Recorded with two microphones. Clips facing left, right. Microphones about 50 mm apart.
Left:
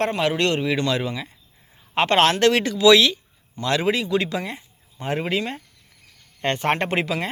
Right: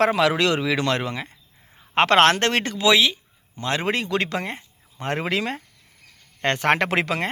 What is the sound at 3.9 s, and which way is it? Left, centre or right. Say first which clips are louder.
Speech: left 2 dB; right.